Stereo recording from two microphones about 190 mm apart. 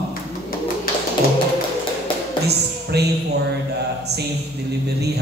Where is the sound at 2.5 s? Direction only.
60° right (ahead or behind).